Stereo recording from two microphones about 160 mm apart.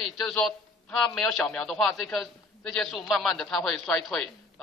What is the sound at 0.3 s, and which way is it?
A man's voice, 5° left (ahead or behind).